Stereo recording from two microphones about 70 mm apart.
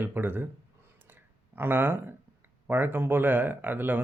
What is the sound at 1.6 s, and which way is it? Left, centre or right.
Speech, right.